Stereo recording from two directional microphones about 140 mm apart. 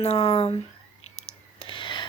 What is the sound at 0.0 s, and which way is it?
Speech, 45° left (ahead or behind).